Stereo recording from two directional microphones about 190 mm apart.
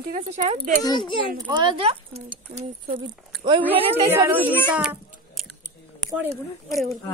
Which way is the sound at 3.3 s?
Centre (ahead or behind).